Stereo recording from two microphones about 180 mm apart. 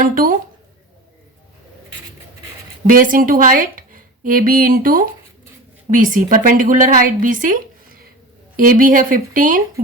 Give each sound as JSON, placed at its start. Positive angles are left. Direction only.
{"t": 0.0, "sound": "speech", "side_deg": -50}
{"t": 2.8, "sound": "a woman's voice", "side_deg": -50}